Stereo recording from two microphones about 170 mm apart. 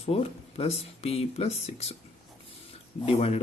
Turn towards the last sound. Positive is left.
turn(degrees=35)  # may be behind; listen again after turning